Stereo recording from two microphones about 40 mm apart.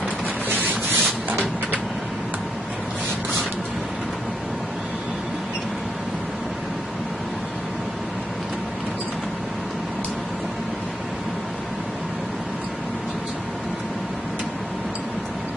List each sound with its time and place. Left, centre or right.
0.5 s sanding: right